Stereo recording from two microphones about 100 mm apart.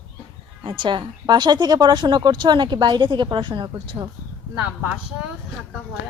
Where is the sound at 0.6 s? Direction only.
55° right (ahead or behind).